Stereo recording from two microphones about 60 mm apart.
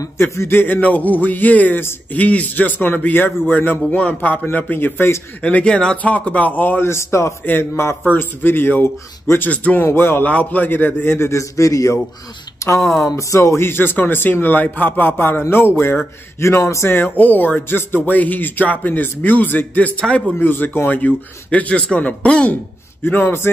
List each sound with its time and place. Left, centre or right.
0.5 s speech: left
0.7 s a man's voice: left
5.4 s a man's voice: left
6.8 s speech: left
8.1 s speech: left
10.2 s speech: left
16.4 s speech: left
16.9 s speech: left
20.0 s a man's voice: centre
20.3 s a man's voice: left
23.0 s speech: left